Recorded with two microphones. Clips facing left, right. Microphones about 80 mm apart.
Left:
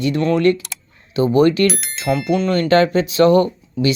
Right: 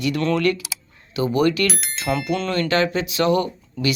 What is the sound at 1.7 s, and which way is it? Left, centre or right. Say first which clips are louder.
Speech: left 4 dB; centre.